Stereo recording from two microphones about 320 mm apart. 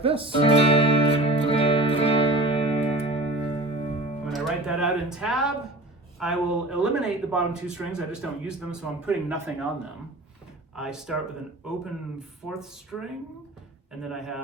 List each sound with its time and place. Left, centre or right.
0.0 s speech: centre
0.4 s music: centre
4.3 s speech: centre
10.8 s speech: centre
12.5 s speech: centre